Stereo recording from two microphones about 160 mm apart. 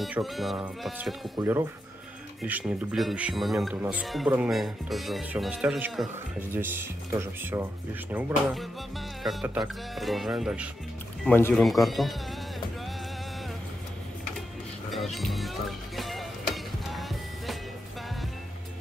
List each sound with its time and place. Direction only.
0.0 s speech: centre (ahead or behind)
1.4 s speech: 15° right (ahead or behind)
11.2 s speech: 15° left (ahead or behind)
11.5 s speech: centre (ahead or behind)
14.9 s music: centre (ahead or behind)